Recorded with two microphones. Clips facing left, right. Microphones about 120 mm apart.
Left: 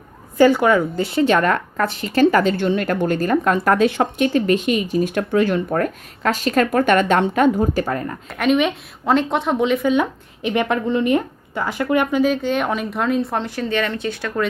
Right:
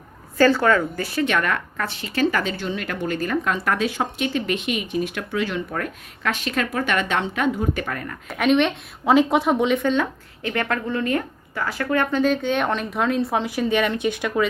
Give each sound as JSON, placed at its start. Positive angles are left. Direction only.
{"t": 0.3, "sound": "a woman's voice", "side_deg": 15}
{"t": 8.3, "sound": "a woman's voice", "side_deg": 0}
{"t": 12.2, "sound": "speech", "side_deg": 5}